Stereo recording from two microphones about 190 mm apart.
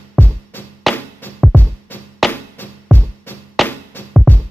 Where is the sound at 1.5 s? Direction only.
10° left (ahead or behind).